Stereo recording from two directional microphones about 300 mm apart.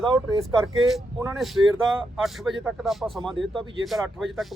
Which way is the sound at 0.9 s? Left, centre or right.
Centre.